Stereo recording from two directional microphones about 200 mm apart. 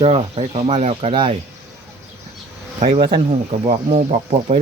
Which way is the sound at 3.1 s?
25° right (ahead or behind).